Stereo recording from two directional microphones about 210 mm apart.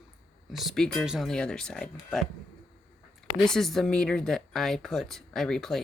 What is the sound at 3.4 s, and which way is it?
Speech, centre (ahead or behind).